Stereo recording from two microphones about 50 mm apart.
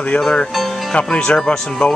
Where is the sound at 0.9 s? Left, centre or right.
Centre.